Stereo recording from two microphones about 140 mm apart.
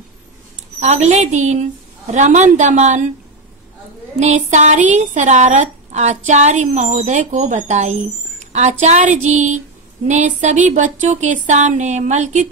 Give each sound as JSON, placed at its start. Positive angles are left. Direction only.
{"t": 0.7, "sound": "a woman's voice", "side_deg": -50}
{"t": 4.2, "sound": "a woman's voice", "side_deg": -55}